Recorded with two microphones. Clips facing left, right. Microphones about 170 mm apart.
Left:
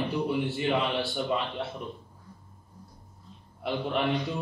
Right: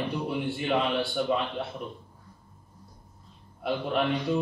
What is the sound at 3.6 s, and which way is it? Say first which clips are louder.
Speech: right 1 dB; centre (ahead or behind).